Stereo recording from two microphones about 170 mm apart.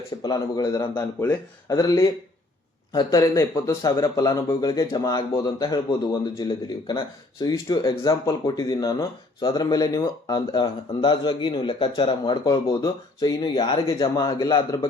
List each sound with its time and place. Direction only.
0.2 s speech: 20° left (ahead or behind)